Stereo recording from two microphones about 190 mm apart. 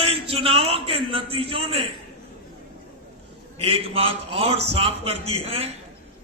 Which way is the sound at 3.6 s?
30° right (ahead or behind).